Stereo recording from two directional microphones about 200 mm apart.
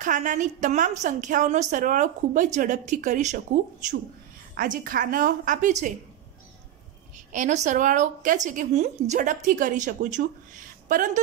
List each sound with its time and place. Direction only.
0.0 s a woman's voice: 40° right (ahead or behind)
4.6 s a woman's voice: 45° right (ahead or behind)
7.3 s a woman's voice: 35° right (ahead or behind)